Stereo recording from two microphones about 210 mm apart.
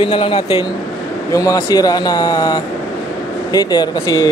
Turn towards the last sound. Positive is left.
turn(degrees=20)  # may be behind; listen again after turning